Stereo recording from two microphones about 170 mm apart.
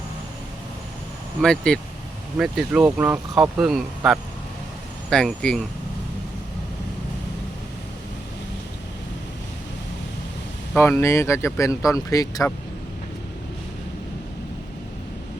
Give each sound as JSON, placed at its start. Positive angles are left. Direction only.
{"t": 1.4, "sound": "speech", "side_deg": 5}
{"t": 10.8, "sound": "speech", "side_deg": 15}